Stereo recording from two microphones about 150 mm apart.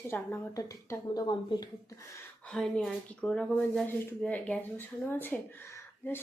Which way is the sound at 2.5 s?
5° left (ahead or behind).